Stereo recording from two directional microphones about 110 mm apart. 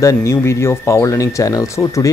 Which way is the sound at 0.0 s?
30° left (ahead or behind).